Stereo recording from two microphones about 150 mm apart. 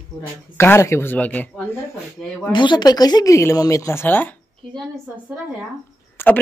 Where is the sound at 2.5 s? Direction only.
30° left (ahead or behind); by 4.3 s 15° left (ahead or behind).